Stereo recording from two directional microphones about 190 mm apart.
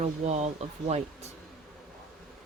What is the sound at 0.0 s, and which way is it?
Speech, 35° right (ahead or behind).